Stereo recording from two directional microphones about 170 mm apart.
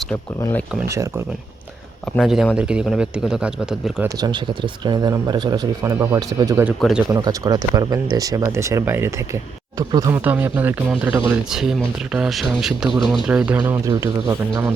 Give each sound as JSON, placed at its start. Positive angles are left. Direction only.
{"t": 0.9, "sound": "speech", "side_deg": -15}
{"t": 2.1, "sound": "speech", "side_deg": 0}
{"t": 4.2, "sound": "speech", "side_deg": -25}
{"t": 6.7, "sound": "speech", "side_deg": 0}
{"t": 7.1, "sound": "speech", "side_deg": -20}
{"t": 13.9, "sound": "speech", "side_deg": -20}